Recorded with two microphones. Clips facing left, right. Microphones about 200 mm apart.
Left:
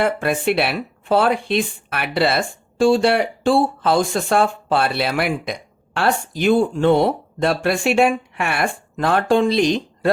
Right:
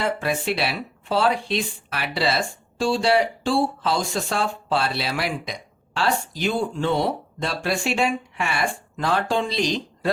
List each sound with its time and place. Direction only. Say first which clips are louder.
0.0 s speech: left 5 dB; 55° left (ahead or behind)